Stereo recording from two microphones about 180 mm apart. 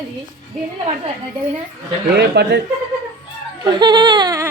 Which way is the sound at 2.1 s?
70° right (ahead or behind).